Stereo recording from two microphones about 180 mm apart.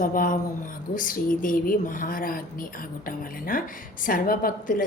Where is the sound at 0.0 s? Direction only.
50° left (ahead or behind).